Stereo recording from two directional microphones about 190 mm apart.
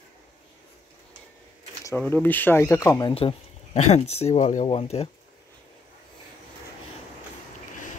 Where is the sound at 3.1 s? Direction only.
30° left (ahead or behind).